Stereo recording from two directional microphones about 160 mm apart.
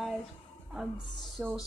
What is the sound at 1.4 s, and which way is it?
Speech, 10° right (ahead or behind).